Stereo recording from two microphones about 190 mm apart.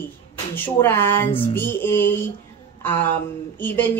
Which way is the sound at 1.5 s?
10° left (ahead or behind).